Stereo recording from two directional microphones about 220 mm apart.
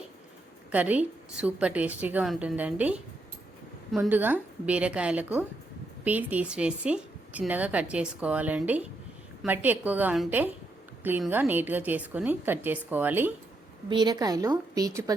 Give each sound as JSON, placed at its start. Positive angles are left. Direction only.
{"t": 0.7, "sound": "a woman's voice", "side_deg": -5}